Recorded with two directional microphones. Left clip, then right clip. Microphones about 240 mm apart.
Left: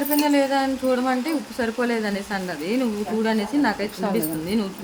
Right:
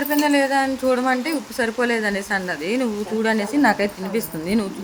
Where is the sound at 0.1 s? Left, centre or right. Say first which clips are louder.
Right 2 dB; centre.